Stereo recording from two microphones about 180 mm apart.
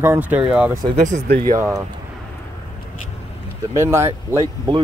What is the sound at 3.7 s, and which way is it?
Speech, 15° right (ahead or behind).